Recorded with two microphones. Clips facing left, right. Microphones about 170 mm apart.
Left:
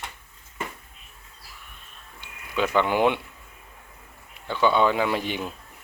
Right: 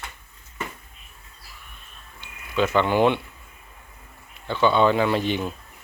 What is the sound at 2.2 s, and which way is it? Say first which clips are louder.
Speech: right 3 dB; 10° left (ahead or behind).